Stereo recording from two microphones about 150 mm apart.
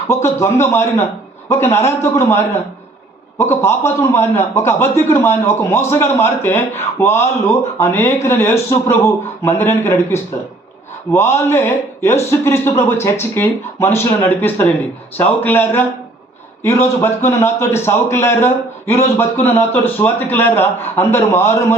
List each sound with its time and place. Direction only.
0.1 s a man's voice: 20° left (ahead or behind)